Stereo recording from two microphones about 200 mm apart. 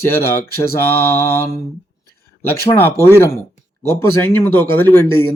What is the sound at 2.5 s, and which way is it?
A man's voice, 10° left (ahead or behind).